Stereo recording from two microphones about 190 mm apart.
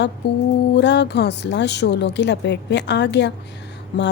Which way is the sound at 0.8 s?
65° left (ahead or behind).